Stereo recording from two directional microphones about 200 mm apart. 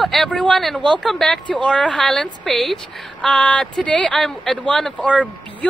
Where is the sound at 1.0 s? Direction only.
Centre (ahead or behind).